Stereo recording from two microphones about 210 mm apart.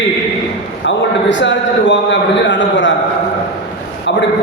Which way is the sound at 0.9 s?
60° left (ahead or behind).